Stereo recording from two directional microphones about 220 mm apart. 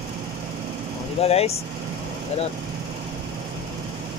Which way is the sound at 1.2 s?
30° left (ahead or behind).